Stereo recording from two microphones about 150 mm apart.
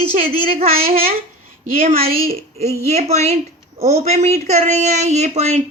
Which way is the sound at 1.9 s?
40° right (ahead or behind).